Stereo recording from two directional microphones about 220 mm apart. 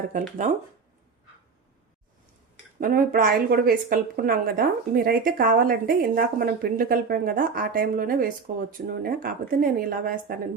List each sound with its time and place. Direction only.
0.1 s a woman's voice: 35° right (ahead or behind)
2.8 s a woman's voice: 40° right (ahead or behind)